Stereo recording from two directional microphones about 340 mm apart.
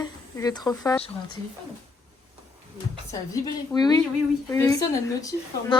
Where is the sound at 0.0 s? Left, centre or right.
Centre.